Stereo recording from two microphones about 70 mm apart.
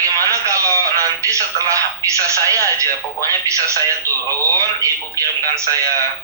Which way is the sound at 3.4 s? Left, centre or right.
Right.